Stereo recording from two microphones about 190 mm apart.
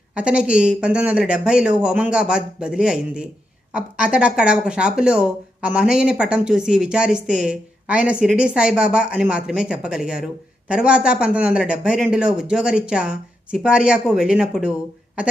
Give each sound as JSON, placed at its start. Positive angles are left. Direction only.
{"t": 0.2, "sound": "speech", "side_deg": -5}